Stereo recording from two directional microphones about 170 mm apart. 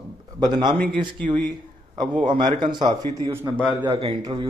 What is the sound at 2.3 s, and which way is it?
Speech, 30° right (ahead or behind).